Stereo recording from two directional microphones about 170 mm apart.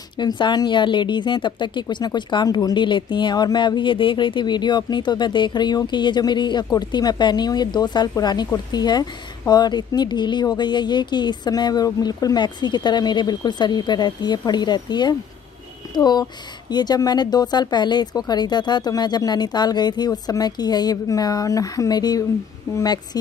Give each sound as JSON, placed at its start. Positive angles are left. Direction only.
{"t": 0.4, "sound": "speech", "side_deg": 25}